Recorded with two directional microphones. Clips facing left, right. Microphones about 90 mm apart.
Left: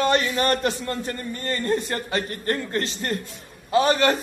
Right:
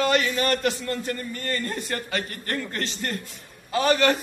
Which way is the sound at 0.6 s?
25° left (ahead or behind).